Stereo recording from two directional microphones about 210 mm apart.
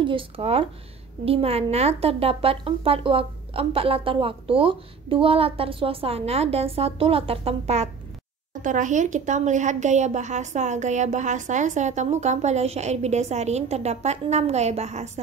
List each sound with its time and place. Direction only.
0.0 s a woman's voice: 25° right (ahead or behind)